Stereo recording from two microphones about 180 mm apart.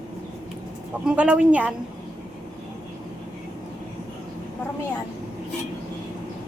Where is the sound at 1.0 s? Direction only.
5° right (ahead or behind).